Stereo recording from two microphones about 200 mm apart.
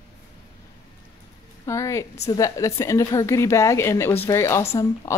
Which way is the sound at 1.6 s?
15° left (ahead or behind).